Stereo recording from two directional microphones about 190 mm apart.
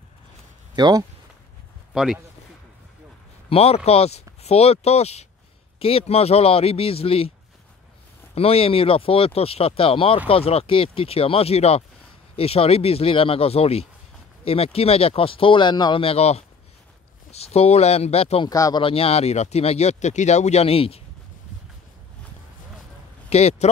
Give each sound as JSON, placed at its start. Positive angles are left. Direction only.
{"t": 0.7, "sound": "speech", "side_deg": -20}
{"t": 3.4, "sound": "speech", "side_deg": 30}
{"t": 8.4, "sound": "speech", "side_deg": 30}
{"t": 18.5, "sound": "speech", "side_deg": 20}
{"t": 23.3, "sound": "speech", "side_deg": 35}